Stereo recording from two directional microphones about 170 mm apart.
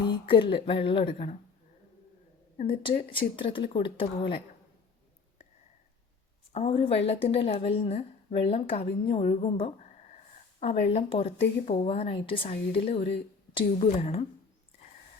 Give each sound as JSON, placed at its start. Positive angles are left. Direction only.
{"t": 0.0, "sound": "a woman's voice", "side_deg": 30}
{"t": 2.6, "sound": "a woman's voice", "side_deg": 30}
{"t": 6.5, "sound": "a woman's voice", "side_deg": 35}
{"t": 9.4, "sound": "a sound", "side_deg": 35}
{"t": 10.6, "sound": "a woman's voice", "side_deg": 40}